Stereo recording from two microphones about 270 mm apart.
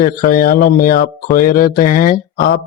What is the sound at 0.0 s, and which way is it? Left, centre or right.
A man's voice, left.